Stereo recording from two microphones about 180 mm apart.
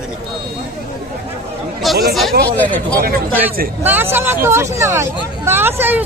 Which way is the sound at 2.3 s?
60° right (ahead or behind).